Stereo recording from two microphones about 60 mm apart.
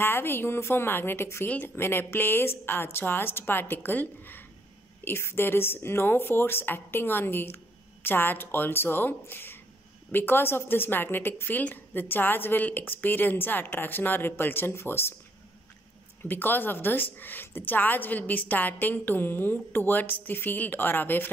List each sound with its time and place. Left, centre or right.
0.0 s a woman's voice: left
16.2 s a woman's voice: left